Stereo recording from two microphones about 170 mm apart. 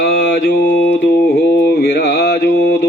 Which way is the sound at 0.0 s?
60° left (ahead or behind).